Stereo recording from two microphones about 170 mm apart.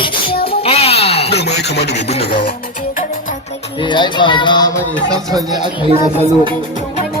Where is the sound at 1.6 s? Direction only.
80° left.